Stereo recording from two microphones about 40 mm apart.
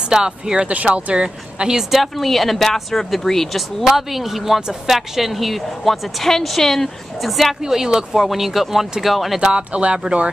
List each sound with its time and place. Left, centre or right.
0.1 s speech: centre
0.9 s speech: right; by 7.5 s centre
7.6 s speech: centre
9.4 s speech: right